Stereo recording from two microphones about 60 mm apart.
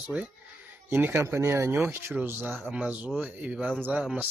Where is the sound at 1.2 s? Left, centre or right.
Right.